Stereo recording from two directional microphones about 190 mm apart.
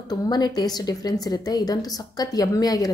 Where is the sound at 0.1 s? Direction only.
20° left (ahead or behind).